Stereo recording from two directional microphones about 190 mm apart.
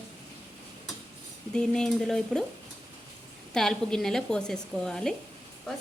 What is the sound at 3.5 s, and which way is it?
A woman's voice, 5° left (ahead or behind).